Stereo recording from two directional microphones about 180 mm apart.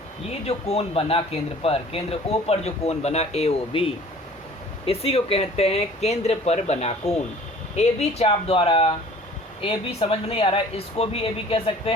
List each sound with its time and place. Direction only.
0.4 s speech: 35° left (ahead or behind)
4.9 s speech: 35° left (ahead or behind)